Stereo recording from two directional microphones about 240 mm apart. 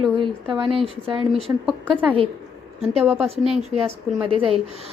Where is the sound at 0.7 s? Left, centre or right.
Right.